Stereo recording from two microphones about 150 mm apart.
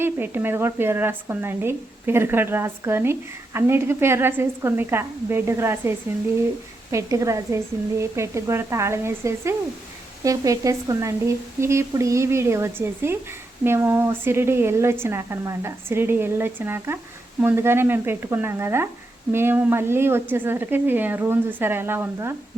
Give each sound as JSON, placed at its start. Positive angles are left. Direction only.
{"t": 0.0, "sound": "speech", "side_deg": -15}
{"t": 6.9, "sound": "speech", "side_deg": -20}